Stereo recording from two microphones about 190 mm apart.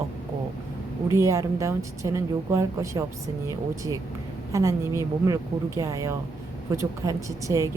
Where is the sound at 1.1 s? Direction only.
15° right (ahead or behind).